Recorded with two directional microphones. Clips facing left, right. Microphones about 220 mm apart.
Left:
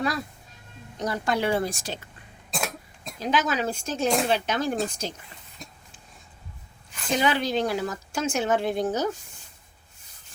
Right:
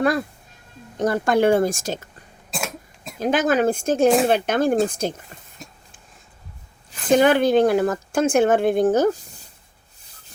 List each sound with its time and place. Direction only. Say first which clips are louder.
0.0 s speech: right 8 dB; 55° right (ahead or behind)
2.5 s cough: right 2 dB; centre (ahead or behind)
3.2 s speech: right 7 dB; 50° right (ahead or behind)
7.1 s speech: right 9 dB; 50° right (ahead or behind)